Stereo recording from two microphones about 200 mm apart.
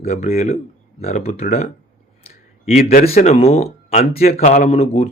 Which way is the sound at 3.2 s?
30° left (ahead or behind).